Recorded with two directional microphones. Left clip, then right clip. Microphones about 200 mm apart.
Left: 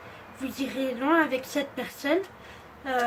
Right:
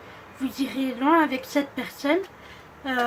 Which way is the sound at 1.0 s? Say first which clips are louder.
Right 4 dB; 20° right (ahead or behind).